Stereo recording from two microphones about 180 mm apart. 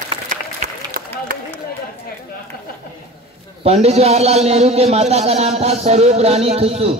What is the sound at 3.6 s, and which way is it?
A man's voice, 35° right (ahead or behind).